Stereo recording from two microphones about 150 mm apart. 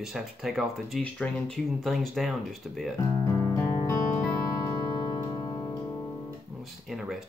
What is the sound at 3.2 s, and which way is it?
Music, 20° left (ahead or behind).